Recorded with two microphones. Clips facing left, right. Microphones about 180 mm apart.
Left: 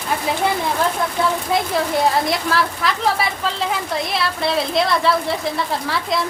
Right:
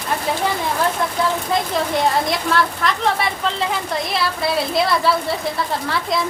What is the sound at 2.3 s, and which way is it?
Speech, centre (ahead or behind).